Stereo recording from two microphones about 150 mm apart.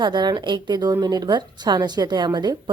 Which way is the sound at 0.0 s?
30° right (ahead or behind).